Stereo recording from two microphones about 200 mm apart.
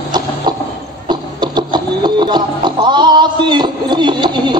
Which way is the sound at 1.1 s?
20° right (ahead or behind).